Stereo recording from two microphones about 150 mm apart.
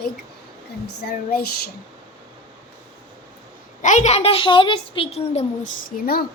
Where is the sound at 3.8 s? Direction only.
55° left (ahead or behind).